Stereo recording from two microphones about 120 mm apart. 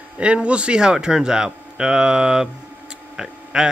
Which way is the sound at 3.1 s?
5° right (ahead or behind).